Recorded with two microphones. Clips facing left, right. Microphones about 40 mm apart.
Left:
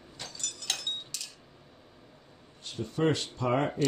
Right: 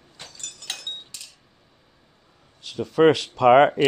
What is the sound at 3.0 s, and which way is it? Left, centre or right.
Speech, right.